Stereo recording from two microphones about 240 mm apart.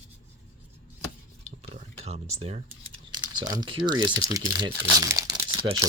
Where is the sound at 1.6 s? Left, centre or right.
Right.